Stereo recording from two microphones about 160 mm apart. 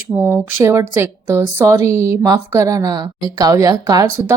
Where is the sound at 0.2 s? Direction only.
15° right (ahead or behind).